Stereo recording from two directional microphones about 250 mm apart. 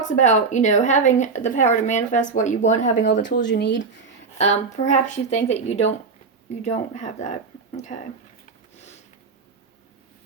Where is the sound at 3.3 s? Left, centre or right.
Left.